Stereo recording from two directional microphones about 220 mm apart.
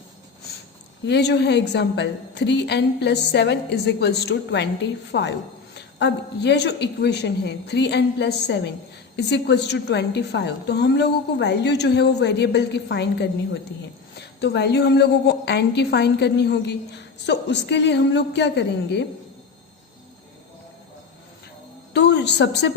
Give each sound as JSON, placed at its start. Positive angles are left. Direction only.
{"t": 1.0, "sound": "a woman's voice", "side_deg": 50}
{"t": 21.9, "sound": "a woman's voice", "side_deg": 50}